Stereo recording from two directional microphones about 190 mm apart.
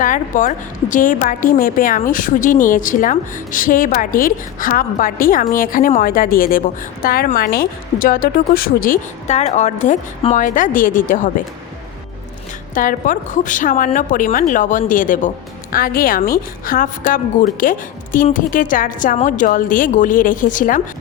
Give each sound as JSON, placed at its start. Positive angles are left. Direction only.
{"t": 0.0, "sound": "a woman's voice", "side_deg": 45}
{"t": 12.7, "sound": "a woman's voice", "side_deg": 45}